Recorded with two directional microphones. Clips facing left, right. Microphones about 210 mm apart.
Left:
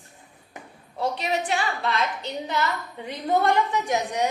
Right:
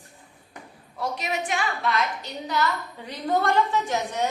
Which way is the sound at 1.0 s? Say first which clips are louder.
Left 3 dB; 30° left (ahead or behind).